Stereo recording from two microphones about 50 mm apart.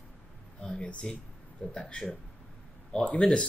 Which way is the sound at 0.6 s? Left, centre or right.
Centre.